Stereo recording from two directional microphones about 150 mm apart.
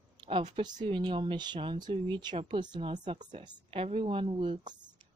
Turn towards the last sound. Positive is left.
turn(degrees=-35)  # may be behind; listen again after turning